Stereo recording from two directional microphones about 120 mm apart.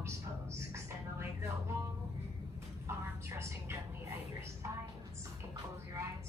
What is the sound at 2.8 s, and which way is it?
Speech, 25° right (ahead or behind).